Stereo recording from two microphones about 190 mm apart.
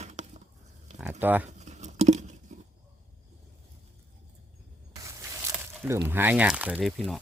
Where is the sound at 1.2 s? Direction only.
10° right (ahead or behind).